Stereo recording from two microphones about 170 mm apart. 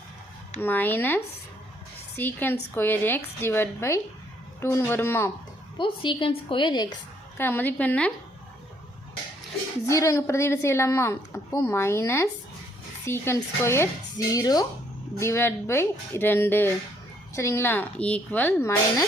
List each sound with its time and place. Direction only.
0.6 s a woman's voice: 10° left (ahead or behind)
5.7 s speech: 30° left (ahead or behind)
7.3 s a woman's voice: 10° left (ahead or behind)
9.8 s a woman's voice: 15° left (ahead or behind)